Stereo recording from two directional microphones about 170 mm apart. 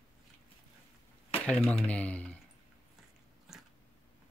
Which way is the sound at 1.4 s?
5° left (ahead or behind).